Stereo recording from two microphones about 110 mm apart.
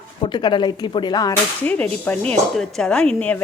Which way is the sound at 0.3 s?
45° left (ahead or behind).